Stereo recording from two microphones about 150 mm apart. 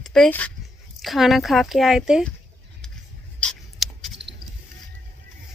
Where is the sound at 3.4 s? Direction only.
Centre (ahead or behind).